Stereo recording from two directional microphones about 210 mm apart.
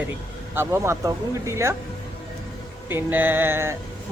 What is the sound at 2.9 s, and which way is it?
Speech, 10° right (ahead or behind).